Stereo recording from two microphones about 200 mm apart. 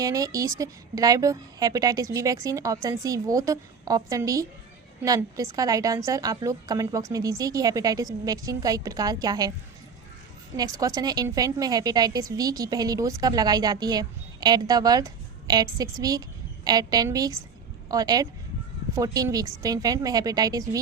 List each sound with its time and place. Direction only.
0.0 s a woman's voice: 15° right (ahead or behind)
10.6 s a woman's voice: 20° right (ahead or behind)